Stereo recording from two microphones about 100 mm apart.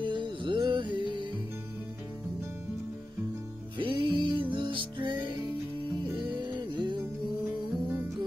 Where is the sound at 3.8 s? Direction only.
55° right (ahead or behind).